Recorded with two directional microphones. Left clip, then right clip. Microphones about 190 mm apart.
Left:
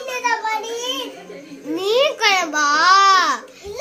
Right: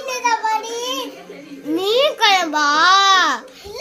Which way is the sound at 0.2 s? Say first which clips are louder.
Right 2 dB; 10° left (ahead or behind).